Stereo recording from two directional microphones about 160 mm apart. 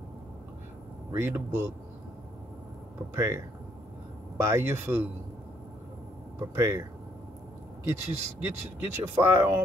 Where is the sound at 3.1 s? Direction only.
15° right (ahead or behind).